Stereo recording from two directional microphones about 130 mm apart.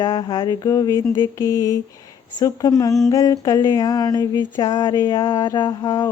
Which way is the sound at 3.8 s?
30° left (ahead or behind).